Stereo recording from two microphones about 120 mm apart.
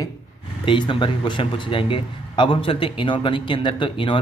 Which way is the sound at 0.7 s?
40° left (ahead or behind).